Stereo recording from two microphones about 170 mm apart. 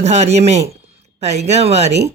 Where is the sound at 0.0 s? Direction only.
40° right (ahead or behind).